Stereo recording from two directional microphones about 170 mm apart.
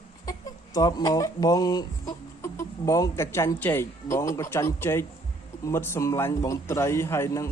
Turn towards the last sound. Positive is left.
turn(degrees=15)  # may be behind; listen again after turning